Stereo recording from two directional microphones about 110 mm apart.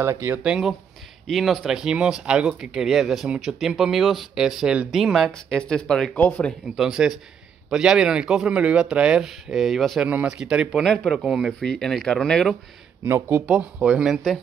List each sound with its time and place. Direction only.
0.0 s speech: 20° right (ahead or behind)
0.4 s speech: 5° right (ahead or behind)
6.1 s speech: 15° left (ahead or behind)
6.8 s speech: 5° right (ahead or behind)
10.0 s speech: 10° right (ahead or behind); by 12.5 s 5° left (ahead or behind)
13.0 s speech: 25° right (ahead or behind)
13.5 s speech: 10° right (ahead or behind)